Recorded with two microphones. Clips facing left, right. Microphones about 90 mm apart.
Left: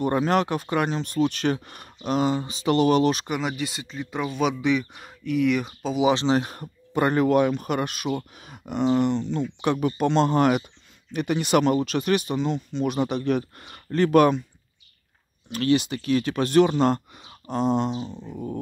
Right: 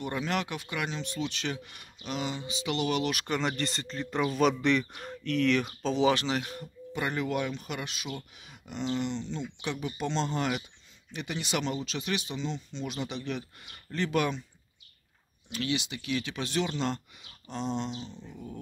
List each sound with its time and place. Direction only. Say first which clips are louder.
0.0 s speech: left 10 dB; 45° left (ahead or behind)
3.3 s speech: left 3 dB; 5° left (ahead or behind)
6.1 s speech: left 9 dB; 30° left (ahead or behind)
6.4 s speech: left 3 dB; 50° left (ahead or behind)
15.5 s speech: left 10 dB; 45° left (ahead or behind)